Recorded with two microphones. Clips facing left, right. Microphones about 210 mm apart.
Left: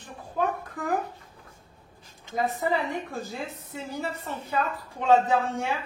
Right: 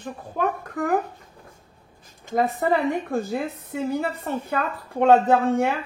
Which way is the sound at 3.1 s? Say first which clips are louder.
Right 9 dB; 60° right (ahead or behind).